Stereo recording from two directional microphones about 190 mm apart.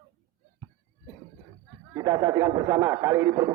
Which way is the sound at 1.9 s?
20° right (ahead or behind).